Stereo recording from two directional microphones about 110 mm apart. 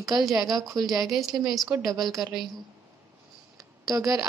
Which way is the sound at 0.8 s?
Centre (ahead or behind).